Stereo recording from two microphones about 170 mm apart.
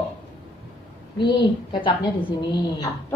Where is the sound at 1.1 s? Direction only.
30° left (ahead or behind).